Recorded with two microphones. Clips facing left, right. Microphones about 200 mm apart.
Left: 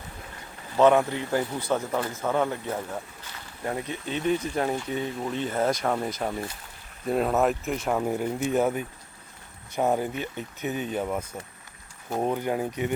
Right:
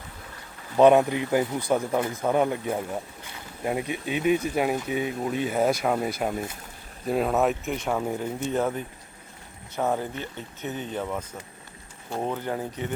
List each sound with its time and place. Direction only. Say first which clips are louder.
0.8 s speech: right 3 dB; 15° right (ahead or behind); by 11.2 s 15° left (ahead or behind)
12.2 s speech: left 3 dB; 15° left (ahead or behind)